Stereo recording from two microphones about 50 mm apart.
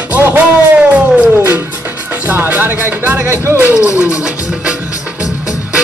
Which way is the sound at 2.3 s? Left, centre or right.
Right.